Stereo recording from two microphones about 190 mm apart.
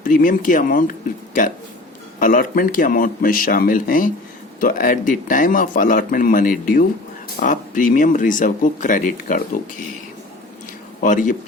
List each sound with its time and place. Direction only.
0.0 s speech: 45° left (ahead or behind)
2.1 s speech: 45° left (ahead or behind)
11.0 s speech: 45° left (ahead or behind)